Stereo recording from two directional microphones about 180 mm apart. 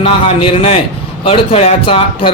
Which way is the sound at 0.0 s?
30° left (ahead or behind).